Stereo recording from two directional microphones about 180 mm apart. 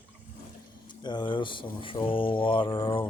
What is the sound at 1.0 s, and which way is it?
Speech, 25° left (ahead or behind).